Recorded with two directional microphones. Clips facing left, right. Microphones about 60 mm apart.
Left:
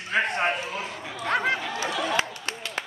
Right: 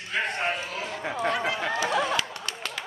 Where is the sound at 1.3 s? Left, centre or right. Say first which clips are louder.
Left 3 dB; left.